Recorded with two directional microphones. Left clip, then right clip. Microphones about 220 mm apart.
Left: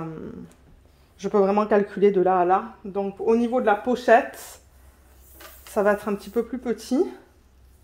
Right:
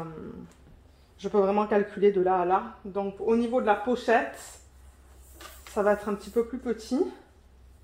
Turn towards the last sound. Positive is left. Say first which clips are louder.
# left 4 dB
turn(degrees=55)  # may be behind; listen again after turning